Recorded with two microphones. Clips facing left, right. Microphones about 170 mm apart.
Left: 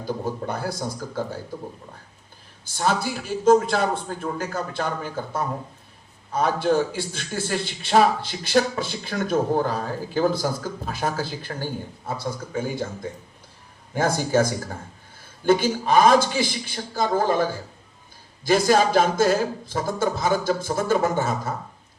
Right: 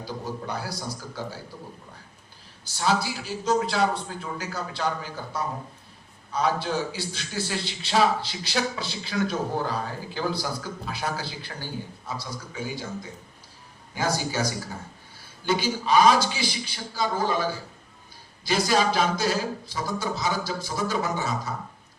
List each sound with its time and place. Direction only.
0.0 s a man's voice: 50° left (ahead or behind)
2.6 s a man's voice: 50° left (ahead or behind)